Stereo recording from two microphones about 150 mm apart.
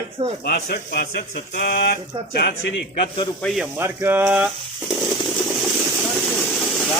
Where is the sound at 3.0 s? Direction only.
35° left (ahead or behind).